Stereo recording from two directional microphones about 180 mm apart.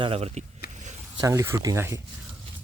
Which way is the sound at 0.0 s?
35° right (ahead or behind).